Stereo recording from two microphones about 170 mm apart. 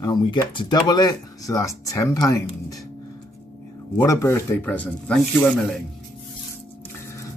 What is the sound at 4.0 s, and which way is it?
Speech, 15° left (ahead or behind).